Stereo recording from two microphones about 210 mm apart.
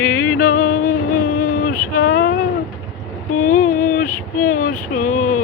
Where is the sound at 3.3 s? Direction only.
90° left.